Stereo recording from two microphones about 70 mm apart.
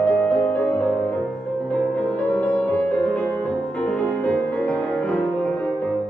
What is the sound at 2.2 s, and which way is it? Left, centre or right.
Music, left.